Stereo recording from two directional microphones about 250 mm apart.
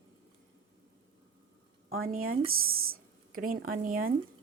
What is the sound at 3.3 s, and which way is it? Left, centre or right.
Speech, right.